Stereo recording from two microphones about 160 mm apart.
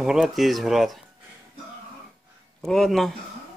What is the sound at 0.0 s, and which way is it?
Speech, centre (ahead or behind).